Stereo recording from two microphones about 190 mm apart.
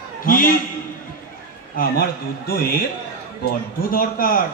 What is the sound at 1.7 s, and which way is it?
A man's voice, 50° left (ahead or behind).